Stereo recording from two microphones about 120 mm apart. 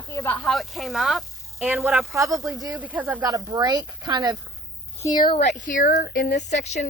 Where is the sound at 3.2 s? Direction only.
35° right (ahead or behind).